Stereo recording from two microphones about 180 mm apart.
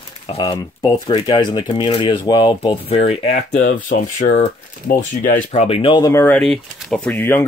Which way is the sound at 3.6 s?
50° left (ahead or behind).